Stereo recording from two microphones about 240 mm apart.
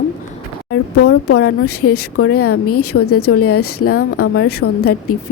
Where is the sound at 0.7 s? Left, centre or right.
Left.